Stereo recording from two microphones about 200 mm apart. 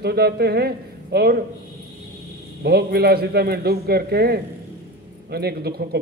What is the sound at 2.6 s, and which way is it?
A man's voice, 50° right (ahead or behind).